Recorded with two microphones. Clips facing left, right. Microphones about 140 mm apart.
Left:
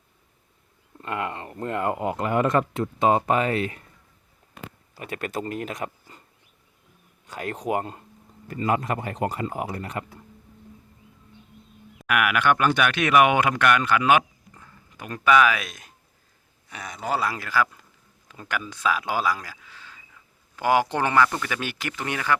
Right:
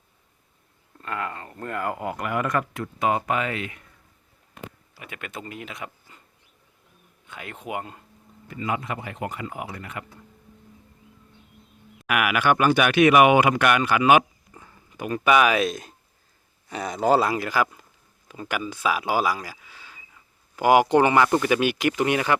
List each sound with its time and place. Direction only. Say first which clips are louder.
0.9 s speech: left 2 dB; 20° left (ahead or behind); by 3.8 s 35° left (ahead or behind)
4.9 s speech: left 7 dB; 40° left (ahead or behind)
7.3 s speech: left 7 dB; 40° left (ahead or behind)
12.0 s speech: even; 5° right (ahead or behind)
15.6 s speech: right 14 dB; 30° right (ahead or behind)
17.2 s speech: right 2 dB; 15° right (ahead or behind)